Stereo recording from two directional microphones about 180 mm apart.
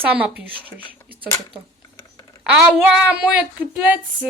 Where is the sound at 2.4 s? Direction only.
Centre (ahead or behind).